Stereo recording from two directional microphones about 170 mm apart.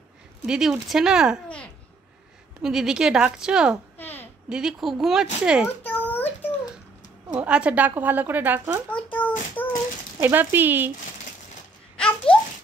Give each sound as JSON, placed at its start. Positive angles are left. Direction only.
{"t": 0.5, "sound": "a woman's voice", "side_deg": 0}
{"t": 2.6, "sound": "a woman's voice", "side_deg": -5}
{"t": 4.0, "sound": "a sound", "side_deg": 10}
{"t": 4.5, "sound": "a woman's voice", "side_deg": -5}
{"t": 5.9, "sound": "a sound", "side_deg": 10}
{"t": 7.3, "sound": "speech", "side_deg": -5}
{"t": 8.9, "sound": "a sound", "side_deg": 10}
{"t": 10.1, "sound": "speech", "side_deg": -10}
{"t": 12.0, "sound": "babbling", "side_deg": 5}